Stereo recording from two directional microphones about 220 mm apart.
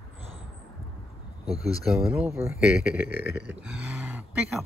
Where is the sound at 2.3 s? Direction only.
10° right (ahead or behind).